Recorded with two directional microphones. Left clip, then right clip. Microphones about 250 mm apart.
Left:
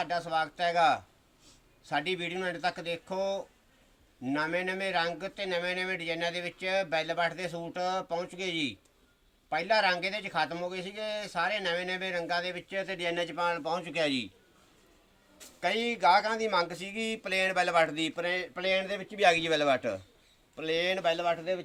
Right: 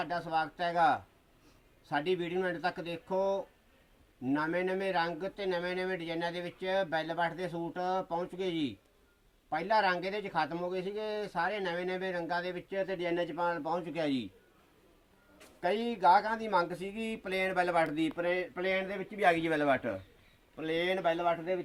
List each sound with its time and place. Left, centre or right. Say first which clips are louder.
0.0 s a man's voice: left 2 dB; centre
15.6 s a man's voice: left 1 dB; centre